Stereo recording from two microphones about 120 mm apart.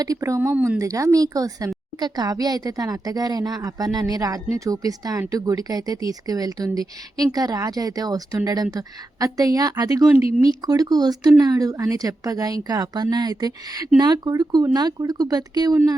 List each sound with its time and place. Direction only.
0.0 s a woman's voice: 30° right (ahead or behind)